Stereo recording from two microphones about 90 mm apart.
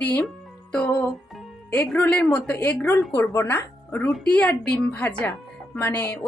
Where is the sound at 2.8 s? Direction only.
30° left (ahead or behind).